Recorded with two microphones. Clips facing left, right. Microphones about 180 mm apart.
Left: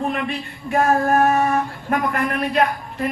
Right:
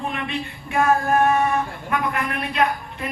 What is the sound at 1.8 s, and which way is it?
Speech, 45° left (ahead or behind).